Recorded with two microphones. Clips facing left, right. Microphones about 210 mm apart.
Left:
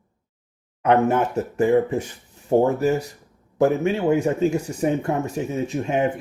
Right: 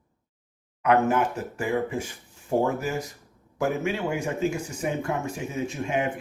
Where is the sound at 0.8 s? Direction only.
30° left (ahead or behind).